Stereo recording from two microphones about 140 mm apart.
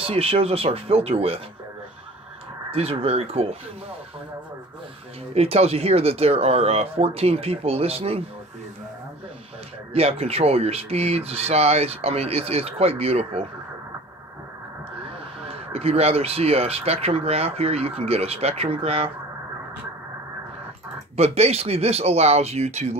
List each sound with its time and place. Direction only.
0.0 s speech: 45° right (ahead or behind)
2.7 s speech: 45° right (ahead or behind)
5.3 s speech: 45° right (ahead or behind)
9.9 s speech: 45° right (ahead or behind)
15.4 s speech: 45° right (ahead or behind)
21.2 s speech: 50° right (ahead or behind)